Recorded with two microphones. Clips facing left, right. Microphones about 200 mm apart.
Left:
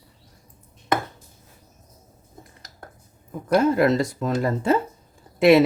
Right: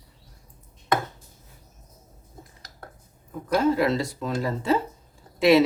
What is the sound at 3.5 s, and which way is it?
Speech, 50° left (ahead or behind).